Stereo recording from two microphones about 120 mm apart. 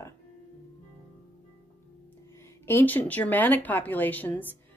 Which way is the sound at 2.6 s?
15° left (ahead or behind).